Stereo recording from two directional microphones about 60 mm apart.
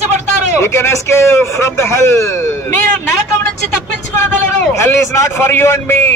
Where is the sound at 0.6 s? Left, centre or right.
Left.